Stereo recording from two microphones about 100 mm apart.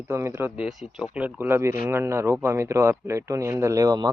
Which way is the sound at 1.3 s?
20° right (ahead or behind).